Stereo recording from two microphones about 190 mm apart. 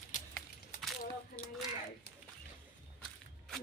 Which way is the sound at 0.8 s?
Centre (ahead or behind).